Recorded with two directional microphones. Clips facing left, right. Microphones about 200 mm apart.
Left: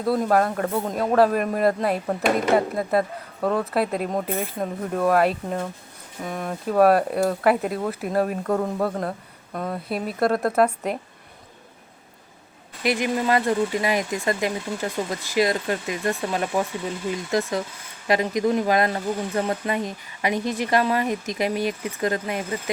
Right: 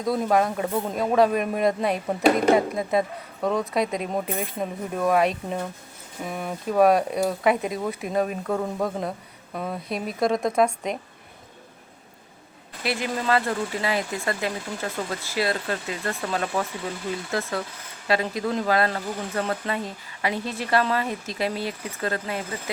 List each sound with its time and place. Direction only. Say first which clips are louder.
0.0 s speech: left 2 dB; centre (ahead or behind)
12.8 s speech: left 4 dB; 15° left (ahead or behind)